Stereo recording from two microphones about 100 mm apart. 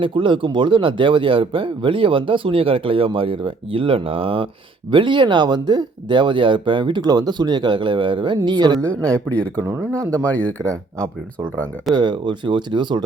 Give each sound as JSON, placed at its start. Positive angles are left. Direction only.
{"t": 0.0, "sound": "speech", "side_deg": -60}
{"t": 9.0, "sound": "speech", "side_deg": 10}
{"t": 9.6, "sound": "speech", "side_deg": -20}
{"t": 10.2, "sound": "speech", "side_deg": 15}
{"t": 11.9, "sound": "speech", "side_deg": -50}